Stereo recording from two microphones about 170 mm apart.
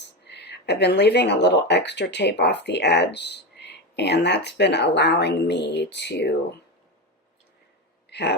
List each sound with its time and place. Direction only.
0.0 s speech: 75° left (ahead or behind)
8.1 s speech: 80° left